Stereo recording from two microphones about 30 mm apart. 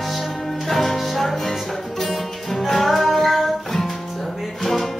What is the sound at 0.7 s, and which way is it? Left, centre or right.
Music, centre.